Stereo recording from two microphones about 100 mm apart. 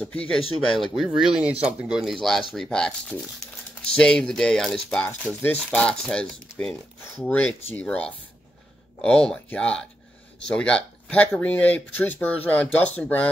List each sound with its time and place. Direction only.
0.0 s speech: 15° left (ahead or behind)
0.4 s speech: 70° left (ahead or behind)
0.7 s speech: centre (ahead or behind)
5.0 s speech: 15° left (ahead or behind)